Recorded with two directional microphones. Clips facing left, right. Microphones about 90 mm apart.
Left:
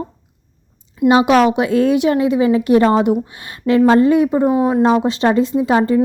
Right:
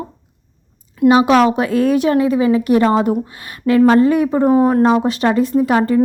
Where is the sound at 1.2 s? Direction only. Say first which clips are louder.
Even; 20° left (ahead or behind).